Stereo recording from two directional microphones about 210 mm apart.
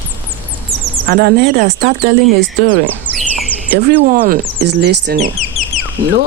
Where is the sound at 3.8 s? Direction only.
40° right (ahead or behind).